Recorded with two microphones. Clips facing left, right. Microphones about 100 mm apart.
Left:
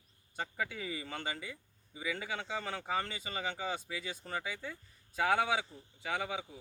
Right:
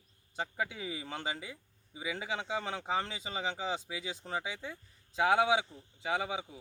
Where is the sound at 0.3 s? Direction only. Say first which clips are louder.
Right 2 dB; 10° right (ahead or behind).